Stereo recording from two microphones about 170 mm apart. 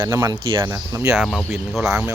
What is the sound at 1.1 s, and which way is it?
Speech, centre (ahead or behind).